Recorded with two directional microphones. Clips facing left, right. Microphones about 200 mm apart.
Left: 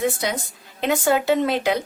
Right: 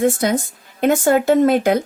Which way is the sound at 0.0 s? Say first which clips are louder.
Right 7 dB; 50° right (ahead or behind).